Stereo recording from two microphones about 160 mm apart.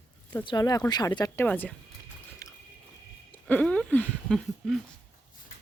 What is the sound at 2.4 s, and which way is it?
Biting, 20° left (ahead or behind).